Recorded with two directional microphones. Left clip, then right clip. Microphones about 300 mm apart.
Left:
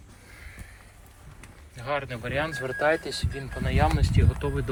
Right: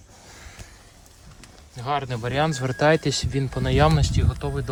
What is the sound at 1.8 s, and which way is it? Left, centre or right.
Speech, centre.